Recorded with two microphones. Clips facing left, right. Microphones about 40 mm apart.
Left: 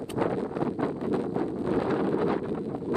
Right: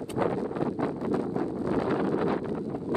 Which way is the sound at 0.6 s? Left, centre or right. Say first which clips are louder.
Even; left.